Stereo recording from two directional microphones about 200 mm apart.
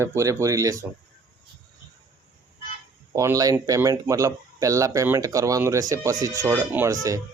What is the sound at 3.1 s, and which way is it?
Speech, 15° right (ahead or behind).